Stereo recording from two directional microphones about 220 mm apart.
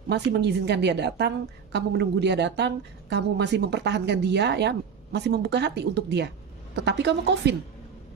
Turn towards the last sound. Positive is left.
turn(degrees=-50)  # may be behind; listen again after turning